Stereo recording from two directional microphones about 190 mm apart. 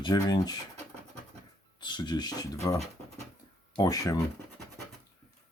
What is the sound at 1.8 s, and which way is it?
Speech, 25° left (ahead or behind).